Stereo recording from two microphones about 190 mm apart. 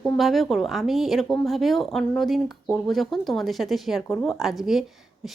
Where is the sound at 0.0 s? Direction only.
Centre (ahead or behind).